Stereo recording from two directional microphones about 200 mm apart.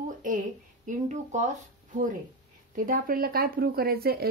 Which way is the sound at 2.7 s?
45° right (ahead or behind).